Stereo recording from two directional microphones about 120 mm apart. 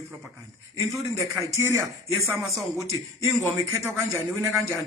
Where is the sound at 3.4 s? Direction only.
25° right (ahead or behind).